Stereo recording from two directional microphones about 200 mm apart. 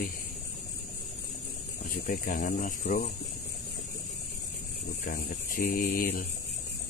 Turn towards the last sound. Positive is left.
turn(degrees=45)  # may be behind; listen again after turning